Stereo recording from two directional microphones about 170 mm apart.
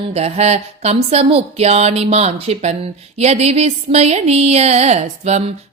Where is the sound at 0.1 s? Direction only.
40° right (ahead or behind).